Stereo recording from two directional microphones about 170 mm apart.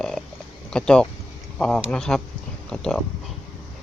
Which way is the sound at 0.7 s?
5° left (ahead or behind).